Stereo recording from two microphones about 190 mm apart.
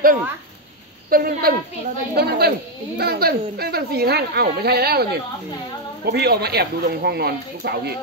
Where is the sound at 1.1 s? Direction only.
50° right (ahead or behind).